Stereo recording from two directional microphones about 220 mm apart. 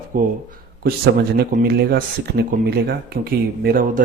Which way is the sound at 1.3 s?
45° right (ahead or behind).